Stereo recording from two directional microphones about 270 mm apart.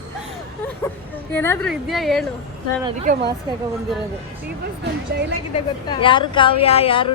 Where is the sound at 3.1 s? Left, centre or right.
Right.